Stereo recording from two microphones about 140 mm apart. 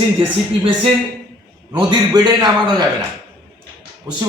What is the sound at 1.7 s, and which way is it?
Speech, 35° right (ahead or behind).